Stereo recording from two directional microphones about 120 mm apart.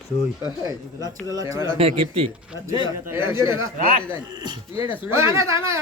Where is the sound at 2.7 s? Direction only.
20° right (ahead or behind).